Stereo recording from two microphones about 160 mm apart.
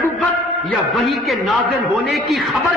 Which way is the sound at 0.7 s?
Centre (ahead or behind).